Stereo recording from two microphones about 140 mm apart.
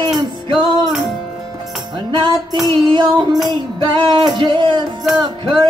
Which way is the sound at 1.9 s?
30° right (ahead or behind).